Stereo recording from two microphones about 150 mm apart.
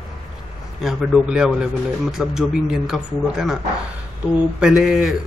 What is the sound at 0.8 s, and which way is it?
A man's voice, 5° right (ahead or behind).